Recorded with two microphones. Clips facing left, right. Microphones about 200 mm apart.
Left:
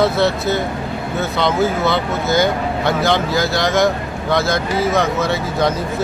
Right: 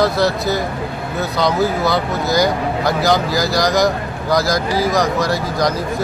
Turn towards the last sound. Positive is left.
turn(degrees=5)  # may be behind; listen again after turning